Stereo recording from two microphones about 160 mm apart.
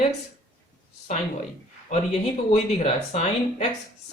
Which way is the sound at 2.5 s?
45° left (ahead or behind).